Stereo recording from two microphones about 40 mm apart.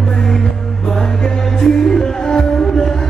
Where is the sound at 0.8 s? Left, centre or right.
Centre.